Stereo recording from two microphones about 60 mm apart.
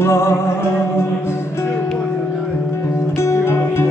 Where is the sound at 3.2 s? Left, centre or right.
Left.